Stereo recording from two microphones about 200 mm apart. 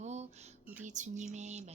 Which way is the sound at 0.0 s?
35° right (ahead or behind).